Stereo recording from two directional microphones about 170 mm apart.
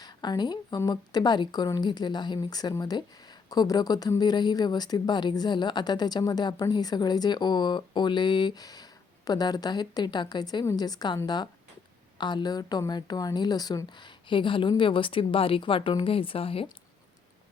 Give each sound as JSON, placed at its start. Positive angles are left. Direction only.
{"t": 0.0, "sound": "speech", "side_deg": 25}